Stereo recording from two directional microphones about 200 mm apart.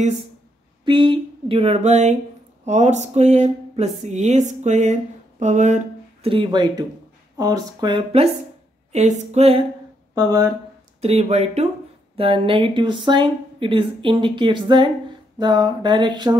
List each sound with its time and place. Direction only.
0.8 s speech: 25° right (ahead or behind)
6.2 s speech: 25° right (ahead or behind)
10.1 s speech: 15° right (ahead or behind)
11.0 s speech: 30° right (ahead or behind)